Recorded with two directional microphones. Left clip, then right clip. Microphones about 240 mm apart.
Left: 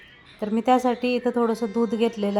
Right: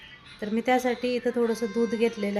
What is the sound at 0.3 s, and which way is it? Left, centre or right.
Speech, centre.